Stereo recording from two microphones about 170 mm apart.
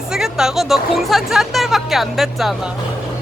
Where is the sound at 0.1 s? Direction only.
5° right (ahead or behind).